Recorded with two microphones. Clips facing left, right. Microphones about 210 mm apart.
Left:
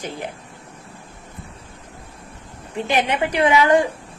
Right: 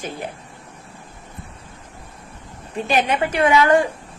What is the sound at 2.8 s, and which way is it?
A woman's voice, 15° left (ahead or behind).